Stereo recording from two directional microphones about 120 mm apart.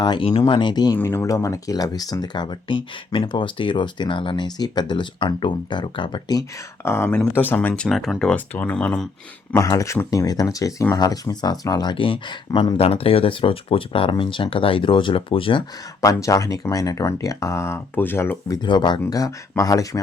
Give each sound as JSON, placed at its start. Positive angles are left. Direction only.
{"t": 0.0, "sound": "speech", "side_deg": 45}
{"t": 0.9, "sound": "speech", "side_deg": 20}
{"t": 6.8, "sound": "speech", "side_deg": 20}
{"t": 7.7, "sound": "speech", "side_deg": 0}
{"t": 8.5, "sound": "speech", "side_deg": 15}
{"t": 9.6, "sound": "speech", "side_deg": 25}
{"t": 16.0, "sound": "speech", "side_deg": 25}
{"t": 18.6, "sound": "speech", "side_deg": 40}